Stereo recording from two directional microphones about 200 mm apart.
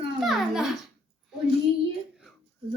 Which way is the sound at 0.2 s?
Centre (ahead or behind).